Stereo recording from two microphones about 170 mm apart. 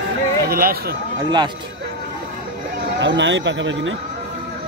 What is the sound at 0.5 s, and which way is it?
Speech, 60° right (ahead or behind).